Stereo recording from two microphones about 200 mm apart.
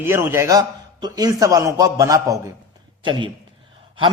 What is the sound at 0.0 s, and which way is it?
A man's voice, 10° right (ahead or behind).